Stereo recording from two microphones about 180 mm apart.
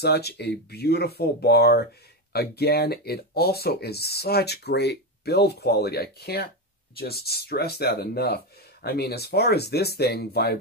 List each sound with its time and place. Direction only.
0.0 s speech: 65° left (ahead or behind)